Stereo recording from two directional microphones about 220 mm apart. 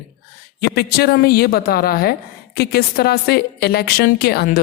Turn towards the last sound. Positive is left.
turn(degrees=45)  # may be behind; listen again after turning